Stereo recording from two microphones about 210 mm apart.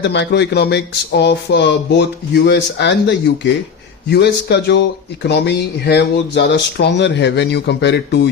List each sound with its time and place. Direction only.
0.0 s speech: 55° left (ahead or behind)